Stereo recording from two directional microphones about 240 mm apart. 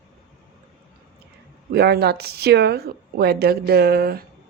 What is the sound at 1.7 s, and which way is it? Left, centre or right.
Speech, right.